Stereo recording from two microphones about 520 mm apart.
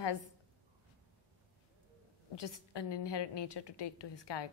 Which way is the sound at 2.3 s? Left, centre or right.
Left.